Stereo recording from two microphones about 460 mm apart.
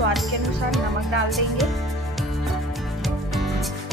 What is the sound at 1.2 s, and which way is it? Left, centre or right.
Speech, centre.